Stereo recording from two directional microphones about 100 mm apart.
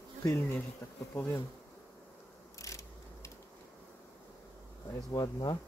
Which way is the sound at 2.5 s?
30° left (ahead or behind).